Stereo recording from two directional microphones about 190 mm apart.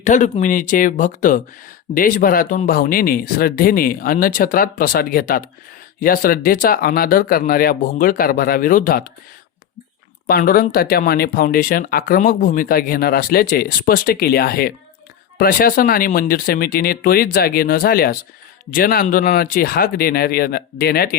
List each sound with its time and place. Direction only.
0.0 s speech: 40° left (ahead or behind)
10.2 s speech: 50° left (ahead or behind)